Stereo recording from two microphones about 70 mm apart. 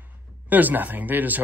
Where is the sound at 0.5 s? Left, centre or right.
Right.